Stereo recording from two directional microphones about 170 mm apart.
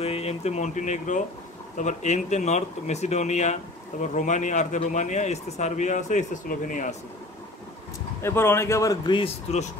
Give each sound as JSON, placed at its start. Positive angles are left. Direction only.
{"t": 0.0, "sound": "a man's voice", "side_deg": 35}
{"t": 8.2, "sound": "a man's voice", "side_deg": 15}